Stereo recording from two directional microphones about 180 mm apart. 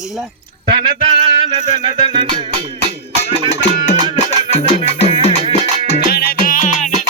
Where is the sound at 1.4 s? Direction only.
30° right (ahead or behind).